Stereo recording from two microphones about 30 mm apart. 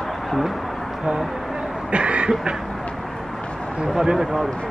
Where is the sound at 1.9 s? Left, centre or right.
Right.